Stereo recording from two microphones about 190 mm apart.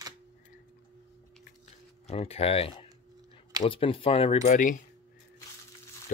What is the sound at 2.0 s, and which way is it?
Speech, 30° left (ahead or behind).